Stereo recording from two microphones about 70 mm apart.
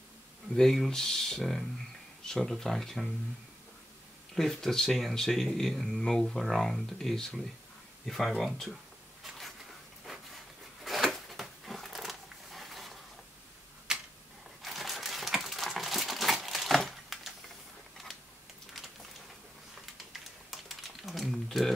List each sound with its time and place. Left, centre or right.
0.6 s speech: centre
4.4 s speech: centre
10.0 s a sound: centre
14.6 s typewriter: centre
20.1 s typing: centre